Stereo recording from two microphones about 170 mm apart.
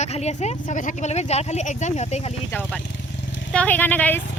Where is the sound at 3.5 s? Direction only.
10° left (ahead or behind).